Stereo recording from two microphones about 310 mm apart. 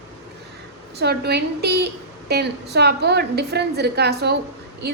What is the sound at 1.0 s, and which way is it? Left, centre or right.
A woman's voice, right.